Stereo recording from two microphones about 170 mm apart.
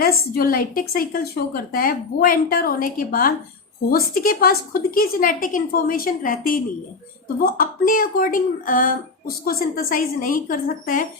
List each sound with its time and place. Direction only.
0.0 s a woman's voice: 60° left (ahead or behind)